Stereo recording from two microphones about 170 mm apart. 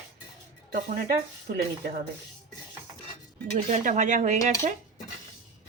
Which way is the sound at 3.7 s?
45° right (ahead or behind).